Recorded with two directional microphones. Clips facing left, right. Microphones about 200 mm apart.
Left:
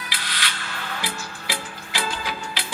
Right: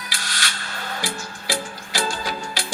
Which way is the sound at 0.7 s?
40° right (ahead or behind).